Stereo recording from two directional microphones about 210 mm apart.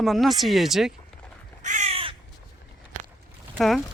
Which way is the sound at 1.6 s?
35° right (ahead or behind).